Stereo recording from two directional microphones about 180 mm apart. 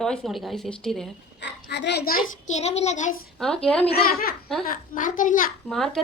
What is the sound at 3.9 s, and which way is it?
Speech, 60° left (ahead or behind).